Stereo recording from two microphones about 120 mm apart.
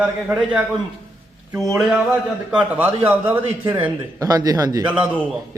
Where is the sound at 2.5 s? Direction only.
10° right (ahead or behind).